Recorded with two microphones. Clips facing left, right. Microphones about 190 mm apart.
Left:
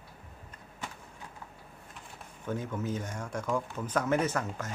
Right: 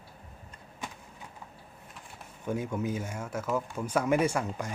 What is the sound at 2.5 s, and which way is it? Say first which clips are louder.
Speech: right 2 dB; 15° right (ahead or behind).